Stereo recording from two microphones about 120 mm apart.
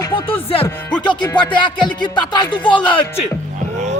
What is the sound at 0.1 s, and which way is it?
Music, 50° left (ahead or behind).